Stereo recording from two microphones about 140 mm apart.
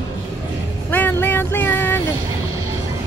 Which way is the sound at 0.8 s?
15° left (ahead or behind).